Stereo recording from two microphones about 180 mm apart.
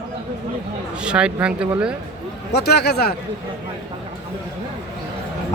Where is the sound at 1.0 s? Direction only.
5° right (ahead or behind).